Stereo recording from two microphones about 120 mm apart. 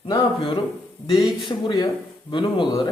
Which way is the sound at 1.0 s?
40° left (ahead or behind).